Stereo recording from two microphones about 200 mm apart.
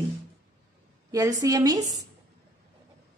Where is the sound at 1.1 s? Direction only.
15° right (ahead or behind).